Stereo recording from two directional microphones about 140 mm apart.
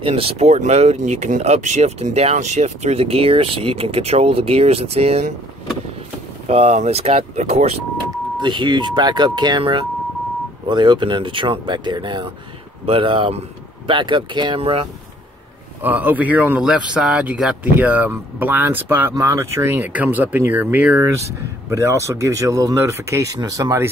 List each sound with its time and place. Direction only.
0.0 s speech: 45° right (ahead or behind)
6.4 s speech: 50° right (ahead or behind)
8.4 s speech: 30° right (ahead or behind)
15.8 s speech: 10° right (ahead or behind)